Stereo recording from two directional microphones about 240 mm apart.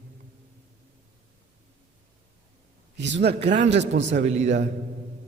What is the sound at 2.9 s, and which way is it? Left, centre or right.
A man's voice, right.